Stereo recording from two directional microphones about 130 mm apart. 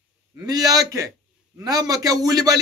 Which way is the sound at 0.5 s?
30° right (ahead or behind).